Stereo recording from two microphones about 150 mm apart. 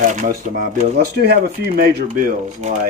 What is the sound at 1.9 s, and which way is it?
Speech, 70° right (ahead or behind).